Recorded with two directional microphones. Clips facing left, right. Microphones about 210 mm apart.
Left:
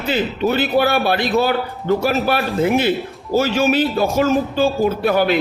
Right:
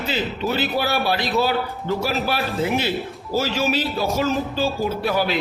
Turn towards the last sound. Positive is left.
turn(degrees=55)  # may be behind; listen again after turning